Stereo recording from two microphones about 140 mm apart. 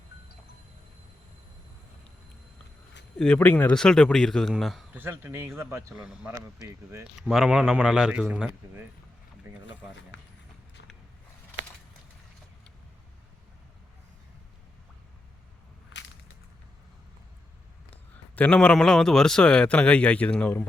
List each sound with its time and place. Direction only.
3.2 s speech: 10° left (ahead or behind)
4.9 s speech: 15° right (ahead or behind)
6.0 s speech: 5° right (ahead or behind)
17.9 s a man's voice: 10° left (ahead or behind)